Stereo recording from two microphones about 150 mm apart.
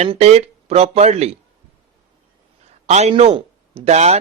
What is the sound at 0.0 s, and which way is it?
Speech, 45° right (ahead or behind).